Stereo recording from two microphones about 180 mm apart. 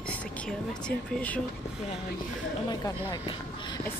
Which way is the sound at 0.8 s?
10° left (ahead or behind).